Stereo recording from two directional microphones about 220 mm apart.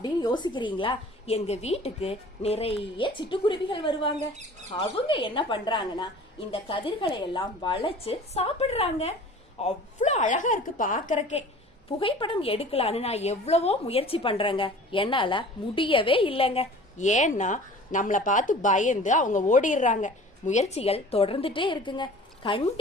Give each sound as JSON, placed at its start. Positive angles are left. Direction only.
{"t": 0.0, "sound": "a woman's voice", "side_deg": 20}